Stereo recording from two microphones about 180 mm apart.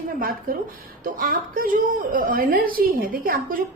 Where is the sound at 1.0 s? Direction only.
50° right (ahead or behind).